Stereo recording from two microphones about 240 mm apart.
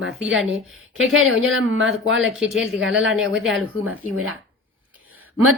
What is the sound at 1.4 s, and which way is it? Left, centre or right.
Speech, right.